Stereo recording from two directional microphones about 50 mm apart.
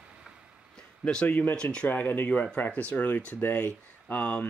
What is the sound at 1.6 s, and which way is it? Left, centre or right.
Speech, centre.